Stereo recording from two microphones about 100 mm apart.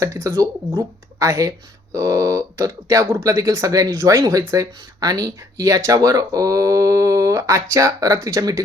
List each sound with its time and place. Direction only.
0.0 s speech: 30° right (ahead or behind)
0.7 s a woman's voice: 45° right (ahead or behind)
1.3 s speech: 30° right (ahead or behind)